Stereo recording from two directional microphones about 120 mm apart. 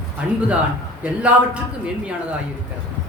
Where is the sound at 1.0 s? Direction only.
10° right (ahead or behind).